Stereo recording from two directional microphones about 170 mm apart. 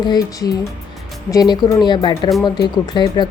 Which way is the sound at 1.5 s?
25° left (ahead or behind).